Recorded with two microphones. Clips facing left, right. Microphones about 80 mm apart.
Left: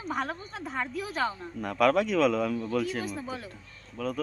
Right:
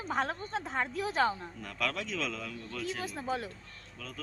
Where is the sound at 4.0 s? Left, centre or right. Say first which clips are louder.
Left 14 dB; left.